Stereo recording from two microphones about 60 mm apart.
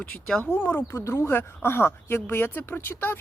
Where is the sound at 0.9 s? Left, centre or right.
Left.